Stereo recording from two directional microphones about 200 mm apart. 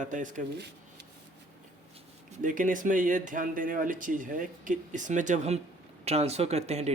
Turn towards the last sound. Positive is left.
turn(degrees=-30)  # may be behind; listen again after turning